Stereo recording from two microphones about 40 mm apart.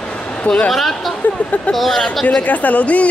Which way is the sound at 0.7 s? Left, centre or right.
Centre.